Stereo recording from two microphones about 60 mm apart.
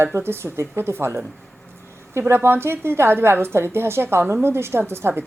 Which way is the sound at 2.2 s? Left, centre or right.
Right.